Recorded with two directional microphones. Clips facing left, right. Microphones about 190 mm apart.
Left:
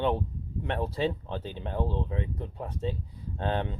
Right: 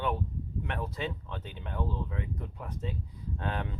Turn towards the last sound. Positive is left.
turn(degrees=30)  # may be behind; listen again after turning